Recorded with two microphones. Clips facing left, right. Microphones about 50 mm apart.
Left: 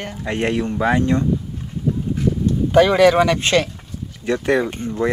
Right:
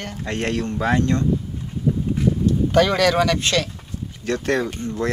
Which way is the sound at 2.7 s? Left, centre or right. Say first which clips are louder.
Left 6 dB; centre.